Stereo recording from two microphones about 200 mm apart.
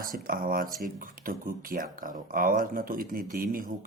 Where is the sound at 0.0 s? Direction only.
45° right (ahead or behind).